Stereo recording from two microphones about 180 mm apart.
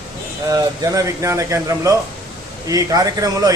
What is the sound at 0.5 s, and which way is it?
A man's voice, 20° right (ahead or behind).